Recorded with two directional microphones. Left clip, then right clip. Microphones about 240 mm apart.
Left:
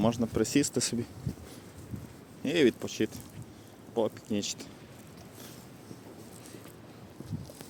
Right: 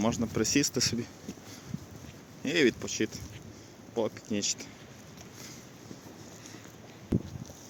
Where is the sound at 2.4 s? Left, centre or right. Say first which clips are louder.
Even; centre.